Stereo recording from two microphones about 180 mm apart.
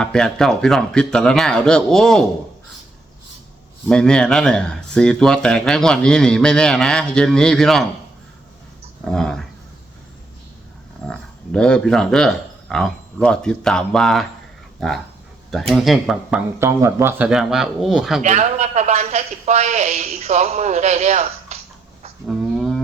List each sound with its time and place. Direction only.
0.0 s speech: 5° left (ahead or behind)
3.8 s speech: 5° left (ahead or behind)
9.0 s speech: 5° left (ahead or behind)
11.1 s speech: 5° left (ahead or behind)
16.6 s speech: 15° right (ahead or behind)
18.2 s speech: 40° right (ahead or behind)
22.3 s a sound: centre (ahead or behind)